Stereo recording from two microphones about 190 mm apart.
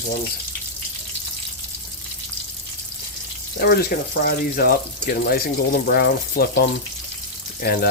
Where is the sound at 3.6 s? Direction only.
55° left (ahead or behind).